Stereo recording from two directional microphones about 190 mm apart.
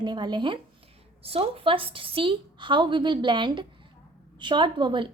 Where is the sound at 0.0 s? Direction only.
20° right (ahead or behind).